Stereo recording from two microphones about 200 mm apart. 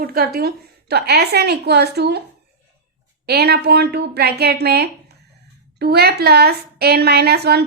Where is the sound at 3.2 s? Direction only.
55° right (ahead or behind).